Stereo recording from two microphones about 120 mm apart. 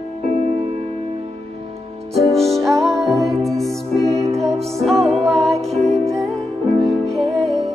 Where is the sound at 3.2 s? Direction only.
25° right (ahead or behind).